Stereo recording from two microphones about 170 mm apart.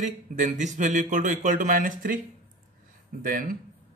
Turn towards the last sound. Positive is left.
turn(degrees=-55)  # may be behind; listen again after turning